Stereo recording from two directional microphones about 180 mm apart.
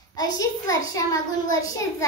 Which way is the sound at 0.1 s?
20° left (ahead or behind).